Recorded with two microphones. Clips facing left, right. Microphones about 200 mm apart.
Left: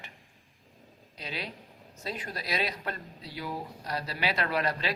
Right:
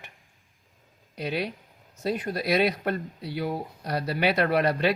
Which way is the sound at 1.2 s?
55° right (ahead or behind).